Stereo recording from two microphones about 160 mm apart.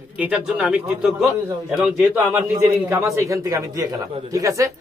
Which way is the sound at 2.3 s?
15° right (ahead or behind).